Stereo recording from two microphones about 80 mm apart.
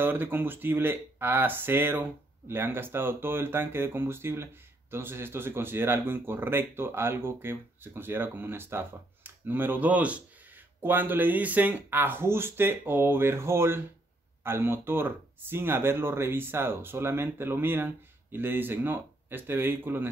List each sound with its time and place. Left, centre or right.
0.0 s speech: right